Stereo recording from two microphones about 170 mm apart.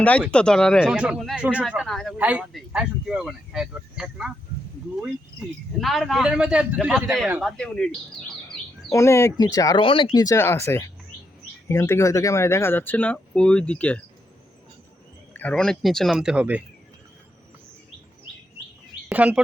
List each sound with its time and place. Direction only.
0.0 s speech: 5° left (ahead or behind)
5.8 s speech: centre (ahead or behind)
8.9 s speech: 15° left (ahead or behind)
15.3 s speech: 10° left (ahead or behind); by 16.6 s 5° right (ahead or behind)
19.0 s speech: 5° right (ahead or behind)